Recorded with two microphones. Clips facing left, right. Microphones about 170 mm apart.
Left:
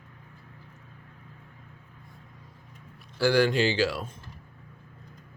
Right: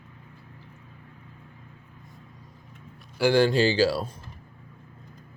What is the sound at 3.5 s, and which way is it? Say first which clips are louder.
Speech: right 3 dB; 35° right (ahead or behind).